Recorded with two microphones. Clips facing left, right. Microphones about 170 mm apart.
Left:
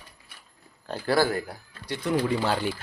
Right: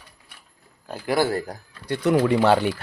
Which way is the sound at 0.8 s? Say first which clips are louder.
Right 1 dB; 15° right (ahead or behind).